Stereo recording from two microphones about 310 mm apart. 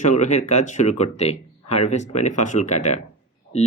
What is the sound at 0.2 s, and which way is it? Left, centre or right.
Speech, left.